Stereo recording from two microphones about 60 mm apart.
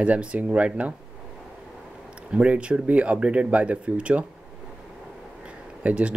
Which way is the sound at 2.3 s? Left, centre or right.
Centre.